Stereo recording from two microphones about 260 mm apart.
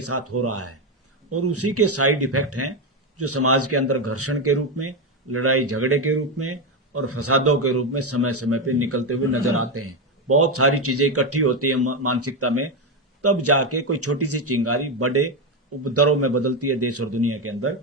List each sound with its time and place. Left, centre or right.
0.0 s speech: right